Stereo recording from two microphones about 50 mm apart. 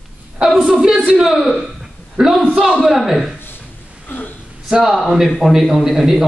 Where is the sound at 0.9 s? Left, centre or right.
Centre.